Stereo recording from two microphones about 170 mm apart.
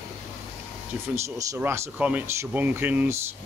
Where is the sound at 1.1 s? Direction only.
20° right (ahead or behind).